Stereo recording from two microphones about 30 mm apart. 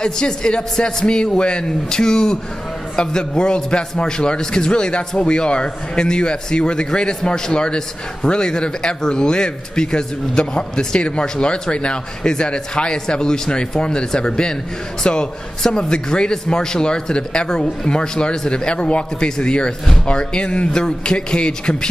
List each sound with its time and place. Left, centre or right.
0.0 s a man's voice: left